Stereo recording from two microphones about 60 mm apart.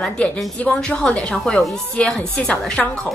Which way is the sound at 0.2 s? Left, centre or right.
Centre.